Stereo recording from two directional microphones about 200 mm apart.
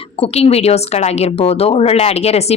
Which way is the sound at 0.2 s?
30° left (ahead or behind).